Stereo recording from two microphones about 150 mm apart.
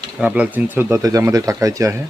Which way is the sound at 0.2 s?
10° right (ahead or behind).